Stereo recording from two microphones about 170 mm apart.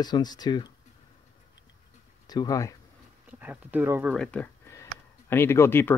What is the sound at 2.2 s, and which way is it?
Speech, 25° left (ahead or behind).